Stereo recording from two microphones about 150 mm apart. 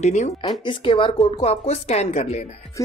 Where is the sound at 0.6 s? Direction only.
35° left (ahead or behind).